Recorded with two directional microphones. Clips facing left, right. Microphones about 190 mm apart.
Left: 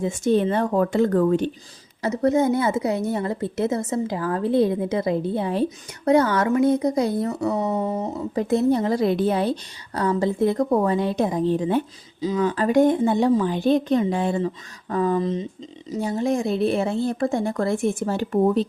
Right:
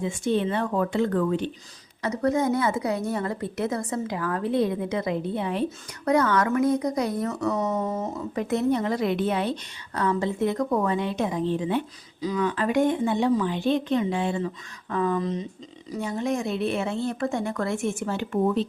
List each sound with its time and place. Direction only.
0.0 s speech: 45° left (ahead or behind)
2.0 s a woman's voice: 25° left (ahead or behind)
8.4 s a woman's voice: 30° left (ahead or behind)